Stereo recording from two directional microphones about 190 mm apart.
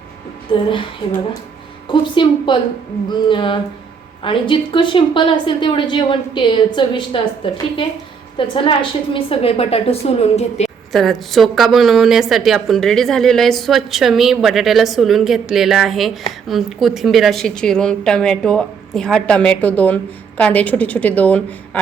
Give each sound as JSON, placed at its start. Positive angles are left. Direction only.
{"t": 0.7, "sound": "a woman's voice", "side_deg": 25}
{"t": 10.9, "sound": "a woman's voice", "side_deg": 0}